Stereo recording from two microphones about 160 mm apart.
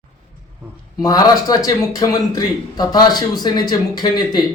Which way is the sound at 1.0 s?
25° left (ahead or behind).